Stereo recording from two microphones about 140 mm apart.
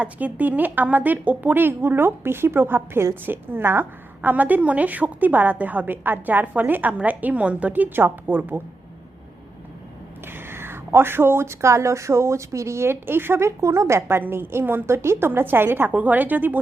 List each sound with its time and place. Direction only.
0.0 s speech: 10° right (ahead or behind)
10.2 s speech: 15° right (ahead or behind)